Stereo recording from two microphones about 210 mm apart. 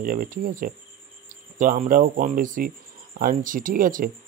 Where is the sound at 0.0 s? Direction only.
40° right (ahead or behind).